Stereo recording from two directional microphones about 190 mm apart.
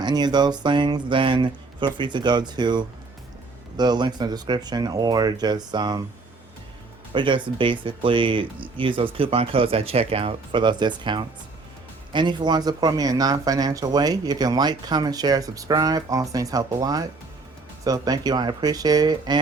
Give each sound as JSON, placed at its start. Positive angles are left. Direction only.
{"t": 0.0, "sound": "speech", "side_deg": -20}
{"t": 7.1, "sound": "speech", "side_deg": -25}